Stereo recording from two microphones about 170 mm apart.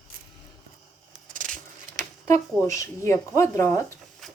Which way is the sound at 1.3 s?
50° right (ahead or behind).